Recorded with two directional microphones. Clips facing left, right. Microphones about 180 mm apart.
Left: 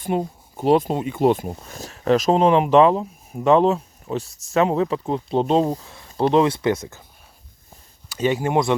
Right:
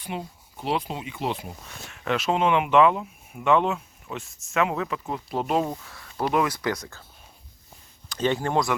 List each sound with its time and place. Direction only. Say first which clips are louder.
0.0 s speech: left 10 dB; 45° left (ahead or behind); by 7.0 s 20° left (ahead or behind)
8.1 s speech: left 4 dB; 10° left (ahead or behind)